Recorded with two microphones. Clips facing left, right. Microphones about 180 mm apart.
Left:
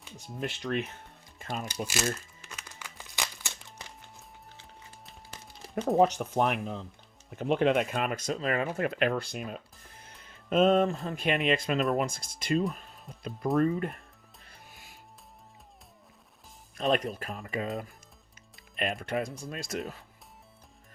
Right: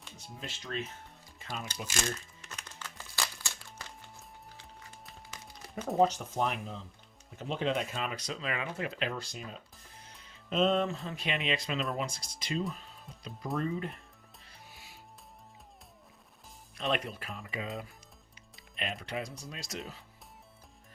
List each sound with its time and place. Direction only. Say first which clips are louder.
0.3 s speech: left 7 dB; 60° left (ahead or behind)
1.4 s music: left 5 dB; 50° left (ahead or behind)
1.9 s crumpling: left 1 dB; 5° left (ahead or behind)
6.0 s speech: left 2 dB; 65° left (ahead or behind)
14.4 s music: left 1 dB; 50° left (ahead or behind)
16.7 s speech: left 6 dB; 40° left (ahead or behind)
18.8 s speech: left 6 dB; 50° left (ahead or behind)